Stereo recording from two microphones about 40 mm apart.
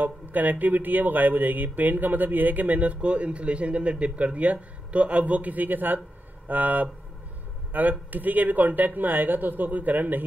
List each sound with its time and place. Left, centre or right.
0.0 s speech: right